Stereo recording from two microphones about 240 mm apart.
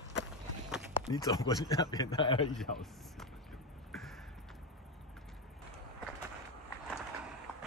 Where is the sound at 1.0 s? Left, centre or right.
Centre.